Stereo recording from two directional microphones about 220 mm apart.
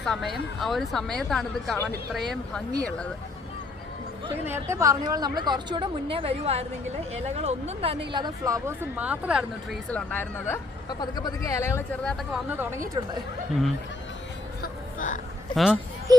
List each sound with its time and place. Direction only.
0.0 s speech: centre (ahead or behind)
4.4 s a woman's voice: 10° right (ahead or behind)
9.9 s speech: 10° left (ahead or behind)
12.5 s speech: 10° right (ahead or behind)
14.6 s a sound: 35° left (ahead or behind)
15.5 s speech: 5° right (ahead or behind)